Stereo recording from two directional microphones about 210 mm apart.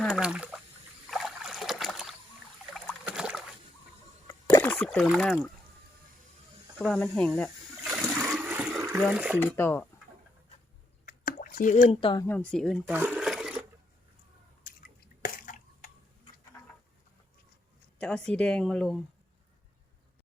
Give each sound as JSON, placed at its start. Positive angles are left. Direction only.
{"t": 0.0, "sound": "speech", "side_deg": -5}
{"t": 1.0, "sound": "boat", "side_deg": 0}
{"t": 4.3, "sound": "a sound", "side_deg": 15}
{"t": 4.7, "sound": "speech", "side_deg": 5}
{"t": 6.7, "sound": "speech", "side_deg": 0}
{"t": 7.9, "sound": "water", "side_deg": -5}
{"t": 9.4, "sound": "speech", "side_deg": 10}
{"t": 11.0, "sound": "drip", "side_deg": 40}
{"t": 11.9, "sound": "speech", "side_deg": 25}
{"t": 12.2, "sound": "speech", "side_deg": 10}
{"t": 12.9, "sound": "a sound", "side_deg": -5}
{"t": 15.2, "sound": "drip", "side_deg": 40}
{"t": 18.0, "sound": "speech", "side_deg": 5}